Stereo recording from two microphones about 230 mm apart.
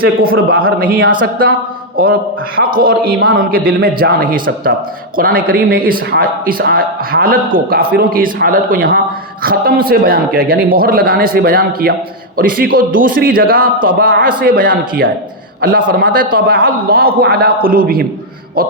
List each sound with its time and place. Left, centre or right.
0.0 s speech: right